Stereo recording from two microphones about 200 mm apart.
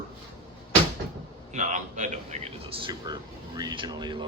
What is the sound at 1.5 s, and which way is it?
Speech, 40° right (ahead or behind).